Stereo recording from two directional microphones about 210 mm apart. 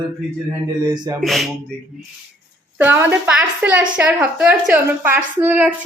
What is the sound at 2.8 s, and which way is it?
A woman's voice, 10° right (ahead or behind).